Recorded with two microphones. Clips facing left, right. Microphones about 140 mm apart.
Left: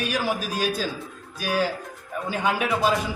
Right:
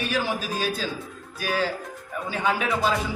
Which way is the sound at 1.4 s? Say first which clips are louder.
Left 1 dB; 15° left (ahead or behind).